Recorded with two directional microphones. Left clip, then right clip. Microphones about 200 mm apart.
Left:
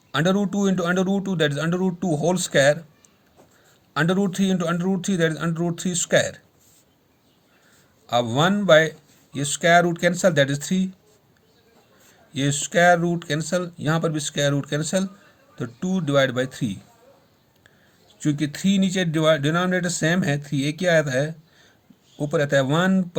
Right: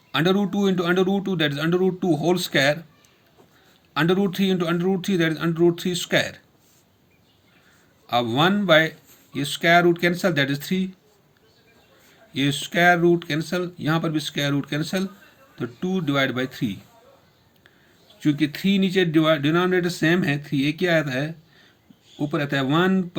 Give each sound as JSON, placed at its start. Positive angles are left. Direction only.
{"t": 0.1, "sound": "speech", "side_deg": 50}
{"t": 3.9, "sound": "speech", "side_deg": 50}
{"t": 8.0, "sound": "speech", "side_deg": 55}
{"t": 12.3, "sound": "speech", "side_deg": 55}
{"t": 18.2, "sound": "speech", "side_deg": 50}